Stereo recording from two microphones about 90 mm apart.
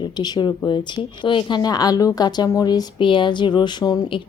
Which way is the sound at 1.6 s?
50° left (ahead or behind).